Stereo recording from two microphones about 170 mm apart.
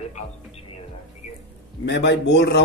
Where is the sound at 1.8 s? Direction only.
90° left.